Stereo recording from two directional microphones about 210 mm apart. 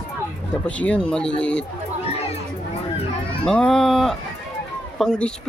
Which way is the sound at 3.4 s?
5° left (ahead or behind).